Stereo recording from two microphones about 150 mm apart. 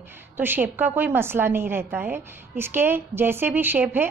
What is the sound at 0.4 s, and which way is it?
A woman's voice, 15° right (ahead or behind).